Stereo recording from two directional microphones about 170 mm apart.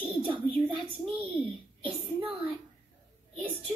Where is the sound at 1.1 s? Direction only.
10° right (ahead or behind).